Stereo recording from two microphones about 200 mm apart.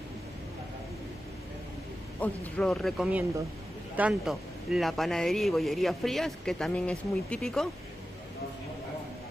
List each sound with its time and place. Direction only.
2.1 s a man's voice: 10° left (ahead or behind)